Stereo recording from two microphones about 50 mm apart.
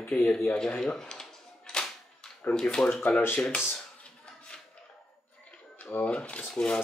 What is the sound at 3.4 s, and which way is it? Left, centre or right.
Speech, left.